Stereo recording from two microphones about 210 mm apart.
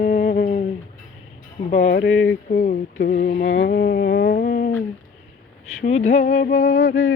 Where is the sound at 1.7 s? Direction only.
35° left (ahead or behind).